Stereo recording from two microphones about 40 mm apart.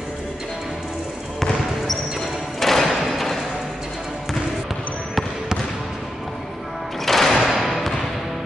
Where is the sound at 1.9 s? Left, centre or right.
Centre.